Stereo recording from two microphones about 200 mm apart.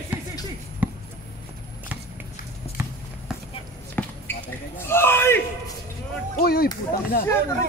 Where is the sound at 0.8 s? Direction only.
10° right (ahead or behind).